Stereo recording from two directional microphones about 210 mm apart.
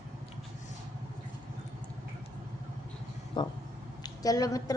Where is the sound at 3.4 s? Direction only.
20° left (ahead or behind).